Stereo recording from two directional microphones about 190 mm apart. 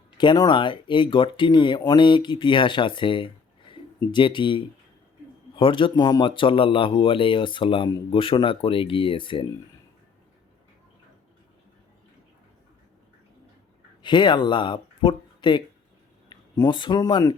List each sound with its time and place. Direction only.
0.2 s speech: 25° left (ahead or behind)
14.0 s speech: 25° left (ahead or behind)